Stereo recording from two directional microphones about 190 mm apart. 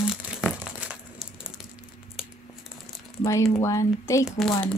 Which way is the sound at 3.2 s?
15° left (ahead or behind).